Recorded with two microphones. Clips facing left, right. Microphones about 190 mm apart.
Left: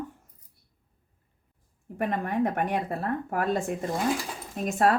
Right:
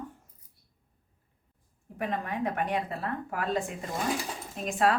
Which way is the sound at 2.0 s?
50° left (ahead or behind).